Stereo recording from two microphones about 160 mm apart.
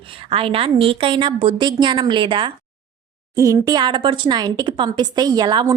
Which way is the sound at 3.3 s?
20° right (ahead or behind).